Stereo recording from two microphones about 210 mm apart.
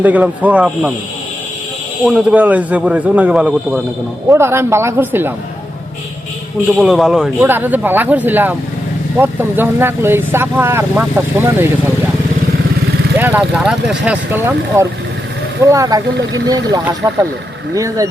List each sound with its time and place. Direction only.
0.0 s speech: 5° right (ahead or behind)
2.0 s speech: 5° right (ahead or behind)
6.7 s speech: centre (ahead or behind)
13.1 s speech: 10° right (ahead or behind)